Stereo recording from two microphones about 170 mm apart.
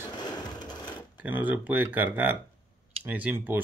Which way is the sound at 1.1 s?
10° right (ahead or behind).